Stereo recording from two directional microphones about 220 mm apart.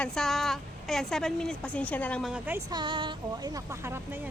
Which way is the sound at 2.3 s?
10° right (ahead or behind).